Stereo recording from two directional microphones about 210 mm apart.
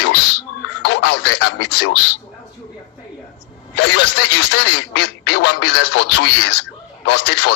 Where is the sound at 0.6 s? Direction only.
80° left.